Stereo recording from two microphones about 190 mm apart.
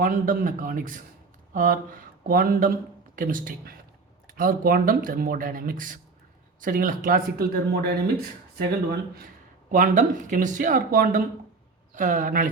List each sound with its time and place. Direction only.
0.0 s speech: 45° right (ahead or behind)